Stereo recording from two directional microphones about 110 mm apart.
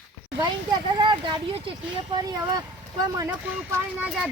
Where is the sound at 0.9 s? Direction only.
45° right (ahead or behind).